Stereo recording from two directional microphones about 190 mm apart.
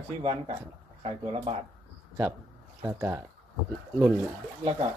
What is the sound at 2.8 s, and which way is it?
Speech, 15° right (ahead or behind).